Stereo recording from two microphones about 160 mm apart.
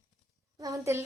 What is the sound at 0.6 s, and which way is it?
Speech, 20° right (ahead or behind).